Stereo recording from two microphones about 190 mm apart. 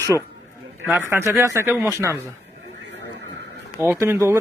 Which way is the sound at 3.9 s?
15° right (ahead or behind).